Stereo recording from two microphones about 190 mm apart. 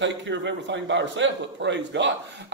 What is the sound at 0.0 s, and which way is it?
A man's voice, 70° right (ahead or behind).